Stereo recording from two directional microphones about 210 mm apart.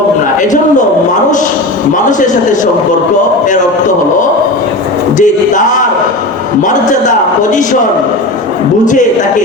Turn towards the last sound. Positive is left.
turn(degrees=35)  # may be behind; listen again after turning